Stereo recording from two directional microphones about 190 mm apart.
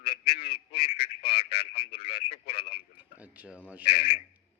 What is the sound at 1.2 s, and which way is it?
Speech, 30° left (ahead or behind).